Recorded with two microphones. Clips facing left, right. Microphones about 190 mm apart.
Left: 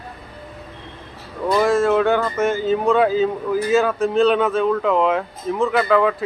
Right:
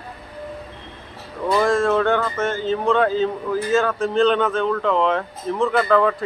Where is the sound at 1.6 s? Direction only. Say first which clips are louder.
Left 2 dB; 5° left (ahead or behind).